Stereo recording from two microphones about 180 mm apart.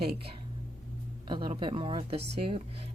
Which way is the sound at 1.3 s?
25° right (ahead or behind).